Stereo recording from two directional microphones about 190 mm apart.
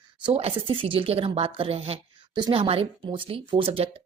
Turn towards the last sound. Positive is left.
turn(degrees=-30)  # may be behind; listen again after turning